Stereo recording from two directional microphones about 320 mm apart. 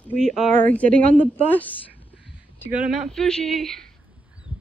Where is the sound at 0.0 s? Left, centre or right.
Centre.